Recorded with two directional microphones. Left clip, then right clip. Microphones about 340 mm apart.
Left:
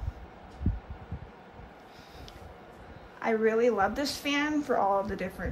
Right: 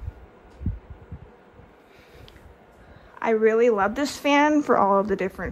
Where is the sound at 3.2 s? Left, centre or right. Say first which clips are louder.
Right 6 dB; centre.